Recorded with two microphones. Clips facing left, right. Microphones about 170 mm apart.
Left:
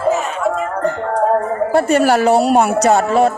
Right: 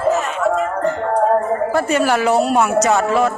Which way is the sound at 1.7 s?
30° left (ahead or behind).